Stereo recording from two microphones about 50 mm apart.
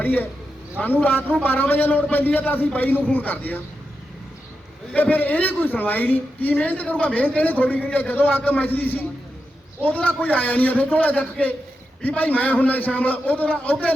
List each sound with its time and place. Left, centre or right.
0.0 s a woman's voice: left
4.9 s a woman's voice: left